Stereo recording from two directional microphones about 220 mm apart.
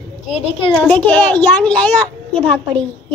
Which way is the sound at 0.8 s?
5° left (ahead or behind).